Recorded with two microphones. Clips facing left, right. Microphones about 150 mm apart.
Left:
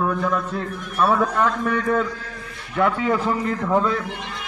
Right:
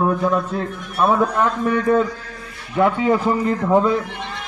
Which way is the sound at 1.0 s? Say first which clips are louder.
Right 2 dB; 10° right (ahead or behind).